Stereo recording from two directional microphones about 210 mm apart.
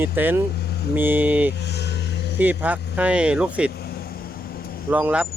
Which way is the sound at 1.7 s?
55° left (ahead or behind).